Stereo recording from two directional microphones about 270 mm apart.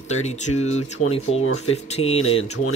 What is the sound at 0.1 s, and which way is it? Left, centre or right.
Speech, left.